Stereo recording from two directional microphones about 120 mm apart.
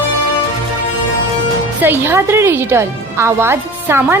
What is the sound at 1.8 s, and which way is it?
Speech, 20° right (ahead or behind).